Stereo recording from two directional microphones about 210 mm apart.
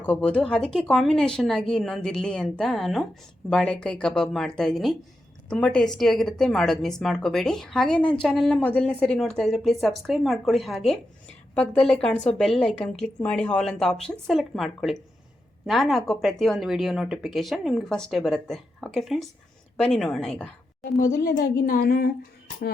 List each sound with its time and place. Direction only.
0.0 s speech: 5° left (ahead or behind)
21.0 s a woman's voice: 40° left (ahead or behind)